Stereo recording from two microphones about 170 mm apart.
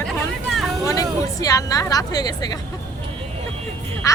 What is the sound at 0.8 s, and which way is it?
Speech, 20° left (ahead or behind).